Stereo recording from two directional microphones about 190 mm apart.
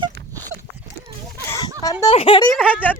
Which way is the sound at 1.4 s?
15° left (ahead or behind).